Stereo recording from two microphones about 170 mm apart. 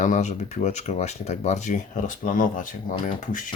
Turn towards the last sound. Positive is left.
turn(degrees=50)  # may be behind; listen again after turning